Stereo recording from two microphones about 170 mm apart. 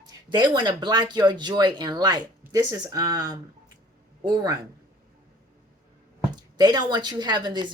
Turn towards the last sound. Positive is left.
turn(degrees=-25)  # may be behind; listen again after turning